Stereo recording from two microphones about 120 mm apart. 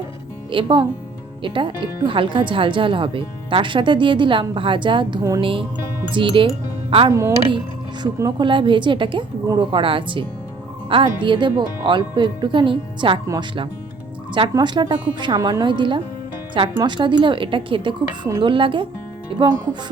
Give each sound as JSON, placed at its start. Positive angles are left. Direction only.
{"t": 0.5, "sound": "speech", "side_deg": -40}
{"t": 7.1, "sound": "speech", "side_deg": -25}
{"t": 8.0, "sound": "speech", "side_deg": -40}
{"t": 14.5, "sound": "speech", "side_deg": -35}